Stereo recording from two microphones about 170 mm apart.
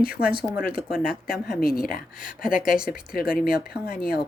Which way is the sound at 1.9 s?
55° left (ahead or behind).